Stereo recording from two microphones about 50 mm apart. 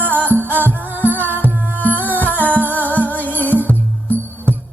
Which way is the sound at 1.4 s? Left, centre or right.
Left.